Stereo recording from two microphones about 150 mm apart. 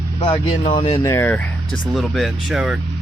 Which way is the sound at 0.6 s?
45° left (ahead or behind).